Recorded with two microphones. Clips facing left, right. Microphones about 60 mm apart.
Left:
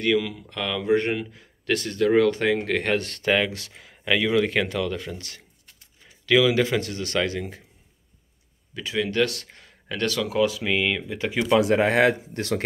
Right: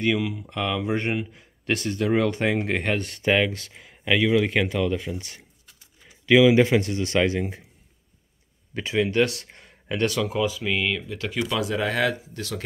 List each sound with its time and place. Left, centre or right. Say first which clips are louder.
0.0 s speech: left 1 dB; centre
2.8 s speech: left 1 dB; centre
8.7 s speech: right 2 dB; right
10.2 s speech: left 2 dB; centre
10.6 s speech: left 1 dB; centre
11.4 s speech: left 8 dB; left